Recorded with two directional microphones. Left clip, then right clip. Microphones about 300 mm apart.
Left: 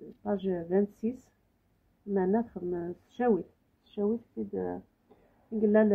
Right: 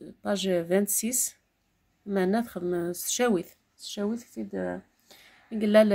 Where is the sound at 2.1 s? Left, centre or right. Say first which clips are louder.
Right 2 dB; right.